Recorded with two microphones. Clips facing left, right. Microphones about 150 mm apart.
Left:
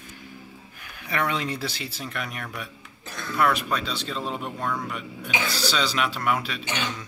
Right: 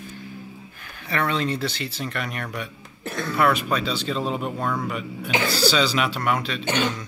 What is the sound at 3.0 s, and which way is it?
Throat clearing, 65° right (ahead or behind).